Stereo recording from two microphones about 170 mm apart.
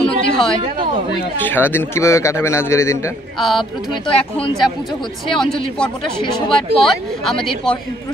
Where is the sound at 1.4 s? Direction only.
10° left (ahead or behind).